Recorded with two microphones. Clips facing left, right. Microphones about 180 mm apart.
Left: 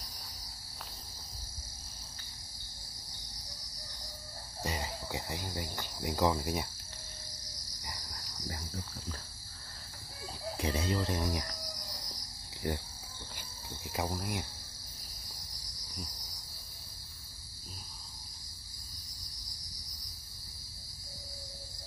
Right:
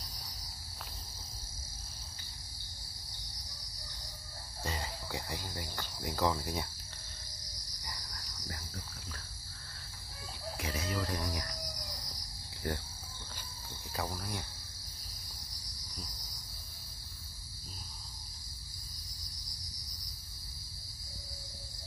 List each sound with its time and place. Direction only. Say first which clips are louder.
4.6 s cricket: left 2 dB; 20° left (ahead or behind)
7.8 s cricket: left 1 dB; 20° left (ahead or behind)
10.6 s a sound: left 4 dB; 30° left (ahead or behind)
12.6 s speech: left 2 dB; 20° left (ahead or behind)
13.9 s speech: left 3 dB; 20° left (ahead or behind)